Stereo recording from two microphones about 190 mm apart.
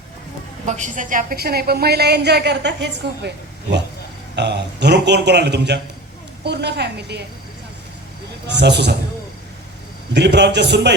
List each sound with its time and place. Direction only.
0.6 s a woman's voice: 40° right (ahead or behind); by 7.2 s 60° right (ahead or behind)
8.4 s a woman's voice: 65° right (ahead or behind)
10.2 s a woman's voice: 65° right (ahead or behind)